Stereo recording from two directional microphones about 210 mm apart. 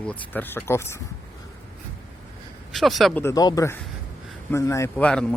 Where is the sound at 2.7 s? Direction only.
Centre (ahead or behind).